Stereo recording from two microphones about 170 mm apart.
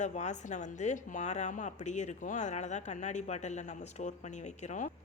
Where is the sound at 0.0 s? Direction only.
45° left (ahead or behind).